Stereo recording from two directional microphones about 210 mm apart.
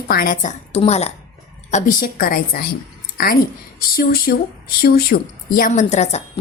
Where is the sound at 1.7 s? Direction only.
40° left (ahead or behind).